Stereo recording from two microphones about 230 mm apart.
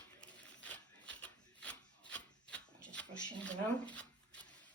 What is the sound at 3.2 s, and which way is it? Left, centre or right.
Speech, centre.